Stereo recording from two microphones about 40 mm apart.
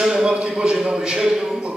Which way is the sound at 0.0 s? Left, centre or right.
Centre.